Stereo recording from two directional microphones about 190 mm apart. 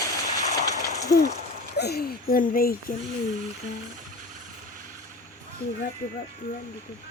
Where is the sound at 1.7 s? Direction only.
60° left (ahead or behind).